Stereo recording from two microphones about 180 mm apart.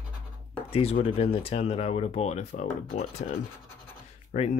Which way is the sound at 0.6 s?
30° left (ahead or behind).